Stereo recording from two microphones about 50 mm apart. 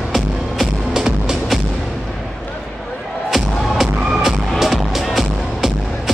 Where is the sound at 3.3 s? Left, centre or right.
Centre.